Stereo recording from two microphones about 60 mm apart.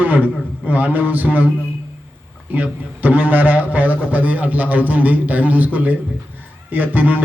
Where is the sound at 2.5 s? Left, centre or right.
Right.